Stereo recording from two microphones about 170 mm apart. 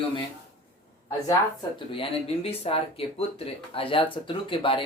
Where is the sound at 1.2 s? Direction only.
25° left (ahead or behind).